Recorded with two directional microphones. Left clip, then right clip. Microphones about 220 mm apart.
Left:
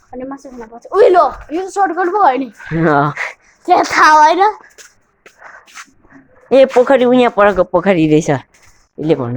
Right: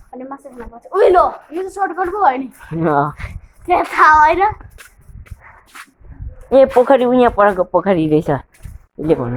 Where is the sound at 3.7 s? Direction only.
45° left (ahead or behind).